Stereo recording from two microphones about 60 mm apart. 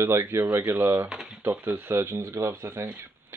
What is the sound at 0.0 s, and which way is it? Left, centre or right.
Speech, right.